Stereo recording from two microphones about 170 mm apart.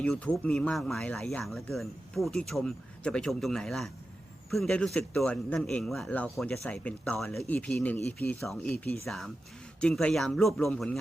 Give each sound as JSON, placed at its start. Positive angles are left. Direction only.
{"t": 0.0, "sound": "speech", "side_deg": 5}